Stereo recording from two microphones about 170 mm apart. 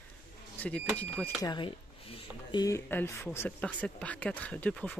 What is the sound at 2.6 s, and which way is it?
Speech, 15° left (ahead or behind).